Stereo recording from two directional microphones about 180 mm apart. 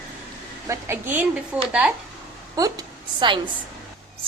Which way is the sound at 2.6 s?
20° right (ahead or behind).